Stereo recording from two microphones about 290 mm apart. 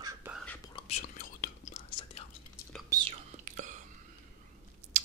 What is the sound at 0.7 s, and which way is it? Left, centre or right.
Whispering, left.